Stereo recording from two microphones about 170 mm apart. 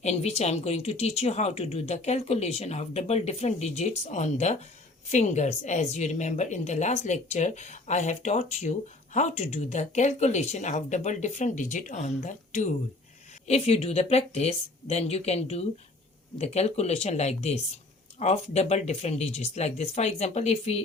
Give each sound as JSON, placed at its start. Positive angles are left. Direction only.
{"t": 0.0, "sound": "a woman's voice", "side_deg": 40}